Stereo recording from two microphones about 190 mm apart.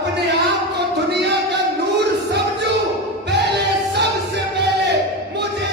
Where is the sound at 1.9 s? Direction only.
60° right (ahead or behind).